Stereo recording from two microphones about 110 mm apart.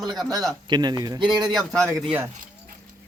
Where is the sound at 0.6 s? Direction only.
40° right (ahead or behind).